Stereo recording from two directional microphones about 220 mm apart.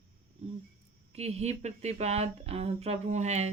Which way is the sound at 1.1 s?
30° right (ahead or behind).